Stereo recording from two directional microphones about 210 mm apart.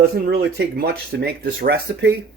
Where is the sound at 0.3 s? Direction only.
50° right (ahead or behind).